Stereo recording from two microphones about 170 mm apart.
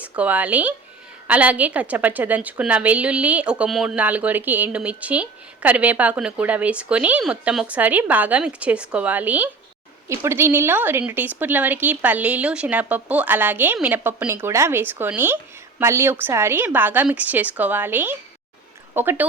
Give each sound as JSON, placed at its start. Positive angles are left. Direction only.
{"t": 0.0, "sound": "a woman's voice", "side_deg": -10}